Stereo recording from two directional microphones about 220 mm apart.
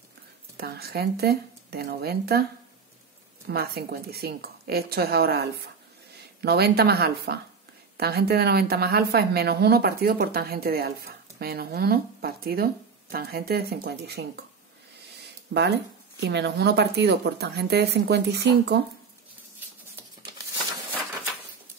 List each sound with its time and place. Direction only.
0.6 s a woman's voice: 45° right (ahead or behind)
3.4 s a woman's voice: 45° right (ahead or behind)
15.1 s a sound: 50° right (ahead or behind)
16.2 s a woman's voice: 50° right (ahead or behind)